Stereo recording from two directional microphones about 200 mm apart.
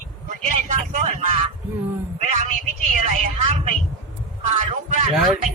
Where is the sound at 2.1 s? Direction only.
35° right (ahead or behind).